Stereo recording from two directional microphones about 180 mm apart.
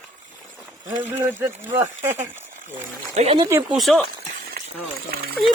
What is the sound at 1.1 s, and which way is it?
Speech, 10° right (ahead or behind).